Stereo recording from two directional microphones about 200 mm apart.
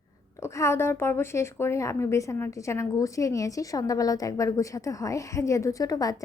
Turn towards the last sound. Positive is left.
turn(degrees=20)  # may be behind; listen again after turning